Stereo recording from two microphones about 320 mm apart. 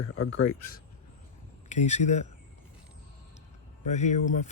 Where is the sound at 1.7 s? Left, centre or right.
Left.